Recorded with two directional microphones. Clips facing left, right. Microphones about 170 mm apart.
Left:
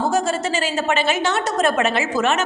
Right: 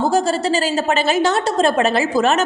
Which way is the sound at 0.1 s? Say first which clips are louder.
Right 3 dB; 35° right (ahead or behind).